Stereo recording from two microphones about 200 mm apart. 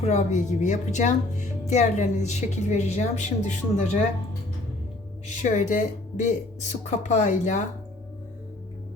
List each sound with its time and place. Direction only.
0.0 s speech: 35° left (ahead or behind)
5.4 s speech: 40° left (ahead or behind)